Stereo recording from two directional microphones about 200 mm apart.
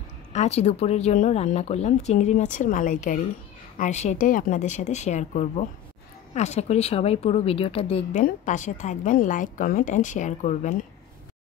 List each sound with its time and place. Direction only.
0.3 s a woman's voice: 35° left (ahead or behind)